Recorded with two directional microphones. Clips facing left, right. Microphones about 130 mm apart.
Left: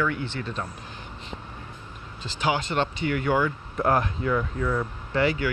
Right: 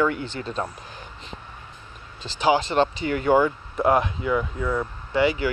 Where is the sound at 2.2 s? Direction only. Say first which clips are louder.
Right 5 dB; 30° right (ahead or behind).